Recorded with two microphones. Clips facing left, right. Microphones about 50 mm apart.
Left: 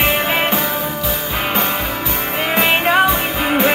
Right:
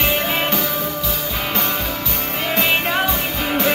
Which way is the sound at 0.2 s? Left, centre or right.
Left.